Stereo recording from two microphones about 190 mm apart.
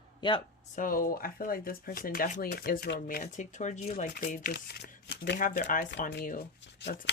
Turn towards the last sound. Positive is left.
turn(degrees=65)  # may be behind; listen again after turning